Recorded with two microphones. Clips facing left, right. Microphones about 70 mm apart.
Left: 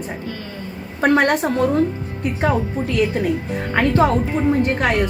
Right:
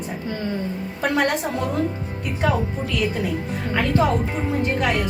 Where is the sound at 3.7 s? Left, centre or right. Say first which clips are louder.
Left 4 dB; left.